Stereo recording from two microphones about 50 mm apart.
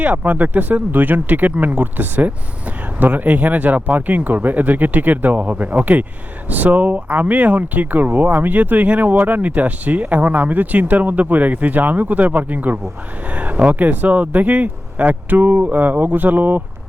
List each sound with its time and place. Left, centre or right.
0.0 s speech: right